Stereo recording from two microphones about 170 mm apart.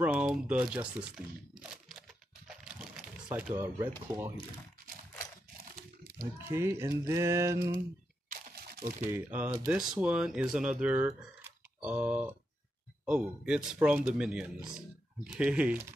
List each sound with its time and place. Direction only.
0.0 s crumpling: 5° right (ahead or behind)
3.5 s speech: 15° right (ahead or behind)
6.1 s speech: 15° right (ahead or behind)
8.3 s a sound: 65° right (ahead or behind)
9.1 s speech: 10° right (ahead or behind)